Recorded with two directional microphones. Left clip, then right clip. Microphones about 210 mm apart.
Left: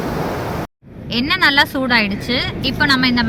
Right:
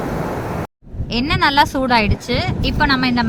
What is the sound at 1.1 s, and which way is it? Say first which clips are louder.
Speech: left 1 dB; 40° right (ahead or behind).